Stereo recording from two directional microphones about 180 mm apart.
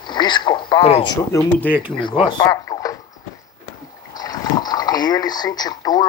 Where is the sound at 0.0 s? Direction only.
25° left (ahead or behind).